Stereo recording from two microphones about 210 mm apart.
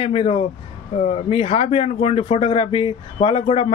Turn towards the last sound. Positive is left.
turn(degrees=30)  # may be behind; listen again after turning